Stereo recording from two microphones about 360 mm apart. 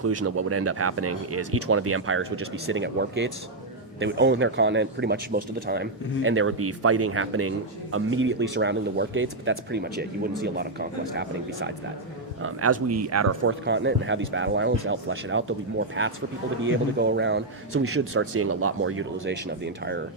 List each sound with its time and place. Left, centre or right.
0.0 s speech: right
12.4 s speech: right